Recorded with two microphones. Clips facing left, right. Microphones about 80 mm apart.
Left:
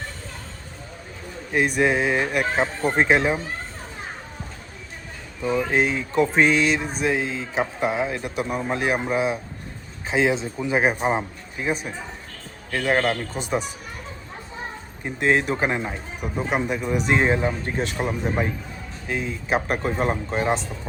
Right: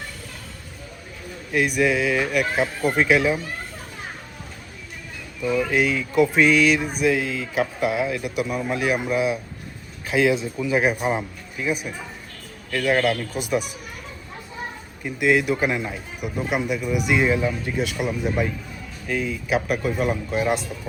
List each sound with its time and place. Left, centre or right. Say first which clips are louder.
1.5 s a man's voice: even; left
5.4 s a man's voice: even; left
15.0 s a man's voice: right 1 dB; left